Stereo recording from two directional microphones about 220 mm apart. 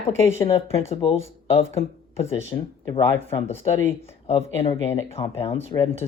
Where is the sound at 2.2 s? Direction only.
25° left (ahead or behind).